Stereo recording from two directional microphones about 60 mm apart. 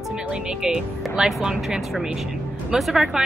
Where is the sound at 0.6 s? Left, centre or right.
Centre.